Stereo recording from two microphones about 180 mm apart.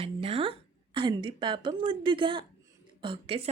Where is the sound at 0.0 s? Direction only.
30° right (ahead or behind).